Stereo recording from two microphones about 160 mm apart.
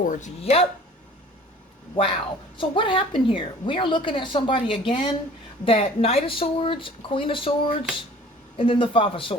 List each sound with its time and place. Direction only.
0.0 s speech: 50° left (ahead or behind)
2.6 s a woman's voice: 30° left (ahead or behind)